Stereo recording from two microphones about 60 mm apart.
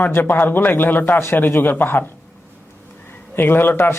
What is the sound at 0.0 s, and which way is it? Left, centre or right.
Speech, left.